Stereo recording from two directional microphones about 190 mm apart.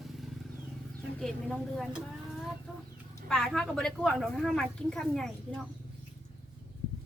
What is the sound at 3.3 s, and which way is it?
Speech, 5° left (ahead or behind).